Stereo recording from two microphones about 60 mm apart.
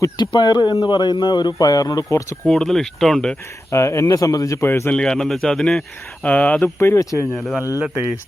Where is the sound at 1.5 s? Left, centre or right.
Left.